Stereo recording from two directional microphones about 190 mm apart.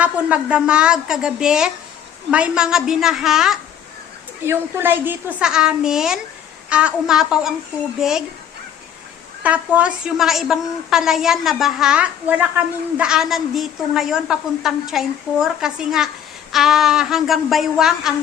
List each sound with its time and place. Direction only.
0.0 s a woman's voice: 5° right (ahead or behind)
9.4 s a woman's voice: 5° right (ahead or behind)